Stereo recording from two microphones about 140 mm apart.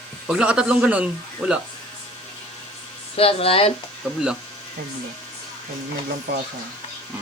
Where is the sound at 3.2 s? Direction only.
45° left (ahead or behind).